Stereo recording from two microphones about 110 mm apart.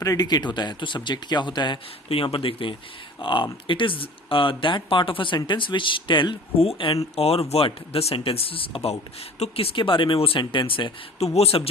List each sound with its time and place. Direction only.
0.0 s speech: 35° left (ahead or behind)
2.0 s speech: 55° left (ahead or behind)
6.6 s speech: 60° left (ahead or behind)
9.4 s speech: 85° left
9.7 s speech: 50° left (ahead or behind)
11.2 s speech: 70° left (ahead or behind)